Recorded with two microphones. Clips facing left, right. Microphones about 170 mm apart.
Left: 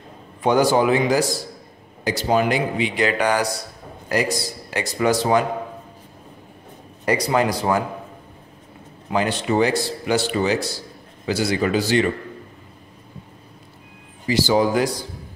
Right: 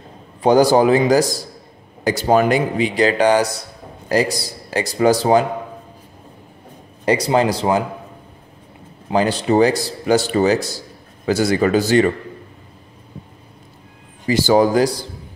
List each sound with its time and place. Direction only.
0.4 s speech: 35° right (ahead or behind)
7.1 s speech: 30° right (ahead or behind)
9.1 s a man's voice: 35° right (ahead or behind)
14.2 s a man's voice: 50° right (ahead or behind)